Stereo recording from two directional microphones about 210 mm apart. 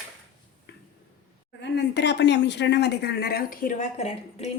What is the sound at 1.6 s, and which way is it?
Speech, 55° left (ahead or behind).